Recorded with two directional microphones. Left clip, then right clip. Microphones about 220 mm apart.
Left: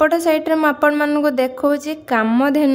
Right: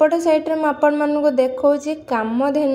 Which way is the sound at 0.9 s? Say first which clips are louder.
Even; 35° left (ahead or behind).